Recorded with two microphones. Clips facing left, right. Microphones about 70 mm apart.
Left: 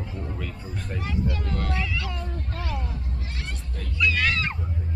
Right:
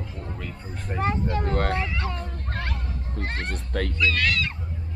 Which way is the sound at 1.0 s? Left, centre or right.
Right.